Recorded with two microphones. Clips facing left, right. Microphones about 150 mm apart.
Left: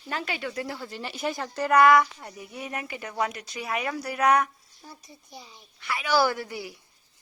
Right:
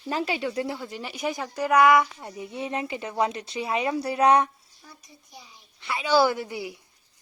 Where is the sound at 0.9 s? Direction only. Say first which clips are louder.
Right 1 dB; 10° right (ahead or behind); by 4.5 s 30° right (ahead or behind).